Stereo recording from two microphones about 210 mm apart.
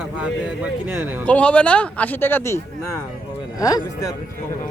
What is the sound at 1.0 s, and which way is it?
Speech, 10° right (ahead or behind).